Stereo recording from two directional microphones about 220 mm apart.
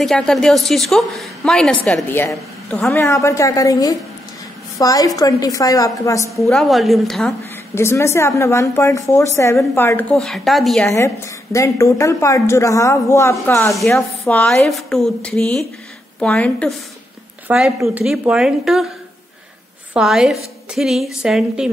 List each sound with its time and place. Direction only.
0.0 s a woman's voice: centre (ahead or behind)
6.3 s a woman's voice: centre (ahead or behind)
7.7 s a woman's voice: 10° left (ahead or behind)
11.5 s speech: 15° left (ahead or behind)
13.7 s a woman's voice: centre (ahead or behind)
19.9 s a woman's voice: 5° right (ahead or behind)